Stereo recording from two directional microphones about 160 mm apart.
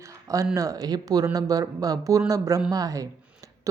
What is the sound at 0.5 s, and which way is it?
A woman's voice, 20° right (ahead or behind).